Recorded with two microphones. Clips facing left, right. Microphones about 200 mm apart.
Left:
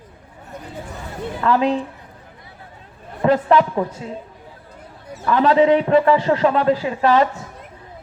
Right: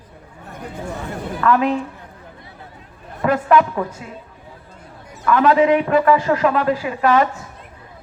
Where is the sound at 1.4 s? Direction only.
30° left (ahead or behind).